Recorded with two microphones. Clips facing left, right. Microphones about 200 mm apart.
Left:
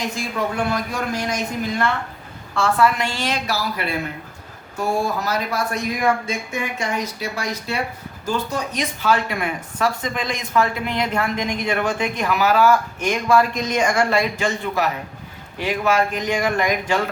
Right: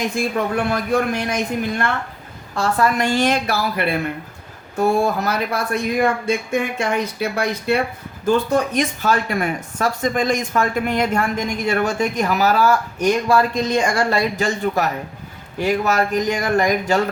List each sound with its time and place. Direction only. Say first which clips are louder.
0.2 s speech: right 3 dB; 60° right (ahead or behind)
2.6 s a woman's voice: even; 45° right (ahead or behind)